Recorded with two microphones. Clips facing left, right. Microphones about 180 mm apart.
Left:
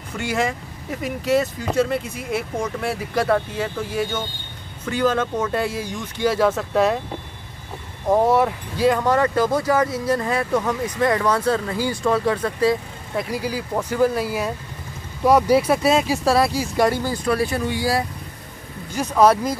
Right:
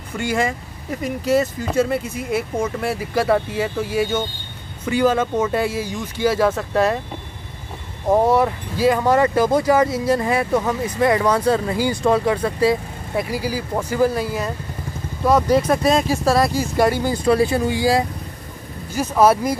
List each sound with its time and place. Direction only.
0.2 s speech: centre (ahead or behind)
8.1 s speech: centre (ahead or behind)
17.0 s speech: 20° right (ahead or behind)
18.9 s speech: 5° right (ahead or behind)